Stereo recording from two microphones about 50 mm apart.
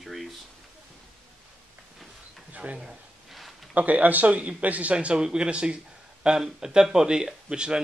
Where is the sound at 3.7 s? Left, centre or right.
Right.